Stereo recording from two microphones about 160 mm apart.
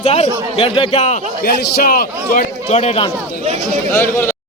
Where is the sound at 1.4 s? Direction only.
65° left (ahead or behind).